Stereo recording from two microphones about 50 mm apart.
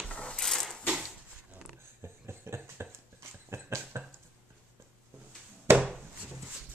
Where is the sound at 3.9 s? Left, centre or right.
Right.